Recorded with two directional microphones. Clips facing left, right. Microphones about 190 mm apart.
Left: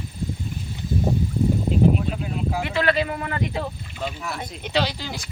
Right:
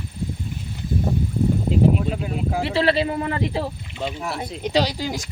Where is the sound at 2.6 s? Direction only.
30° right (ahead or behind).